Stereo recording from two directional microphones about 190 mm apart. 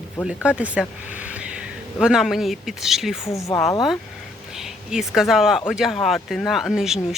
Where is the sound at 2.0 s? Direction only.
Centre (ahead or behind).